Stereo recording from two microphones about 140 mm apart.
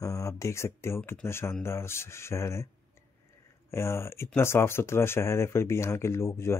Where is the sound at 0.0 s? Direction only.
20° left (ahead or behind).